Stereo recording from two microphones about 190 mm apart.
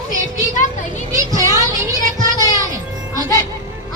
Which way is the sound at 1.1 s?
15° right (ahead or behind).